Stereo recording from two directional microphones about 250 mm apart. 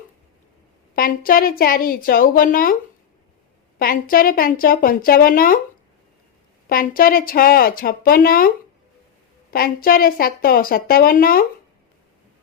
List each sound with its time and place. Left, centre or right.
0.9 s a woman's voice: left
3.8 s a woman's voice: left
6.7 s a woman's voice: left